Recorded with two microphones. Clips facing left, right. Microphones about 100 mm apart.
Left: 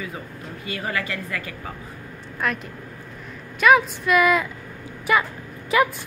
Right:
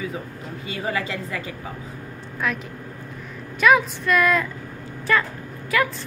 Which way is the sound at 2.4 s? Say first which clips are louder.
Even; centre (ahead or behind).